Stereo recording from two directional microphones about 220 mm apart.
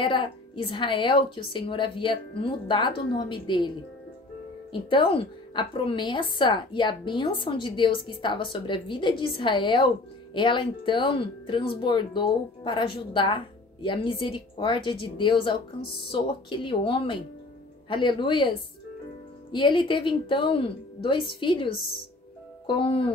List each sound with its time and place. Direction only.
0.0 s speech: 20° left (ahead or behind)
4.8 s speech: 25° left (ahead or behind)